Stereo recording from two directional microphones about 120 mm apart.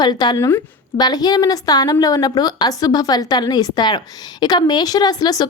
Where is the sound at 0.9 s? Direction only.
35° left (ahead or behind).